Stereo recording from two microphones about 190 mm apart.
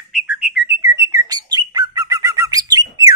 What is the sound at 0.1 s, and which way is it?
Bird, 5° right (ahead or behind).